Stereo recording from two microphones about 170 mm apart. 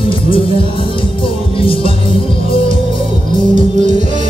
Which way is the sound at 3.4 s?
30° left (ahead or behind).